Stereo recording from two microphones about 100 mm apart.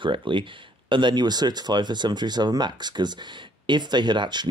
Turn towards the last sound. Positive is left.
turn(degrees=-50)  # may be behind; listen again after turning